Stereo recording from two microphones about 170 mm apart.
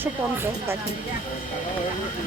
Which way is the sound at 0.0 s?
15° right (ahead or behind).